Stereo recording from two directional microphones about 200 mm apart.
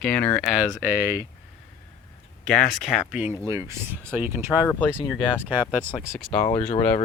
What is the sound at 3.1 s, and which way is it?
Speech, 5° right (ahead or behind).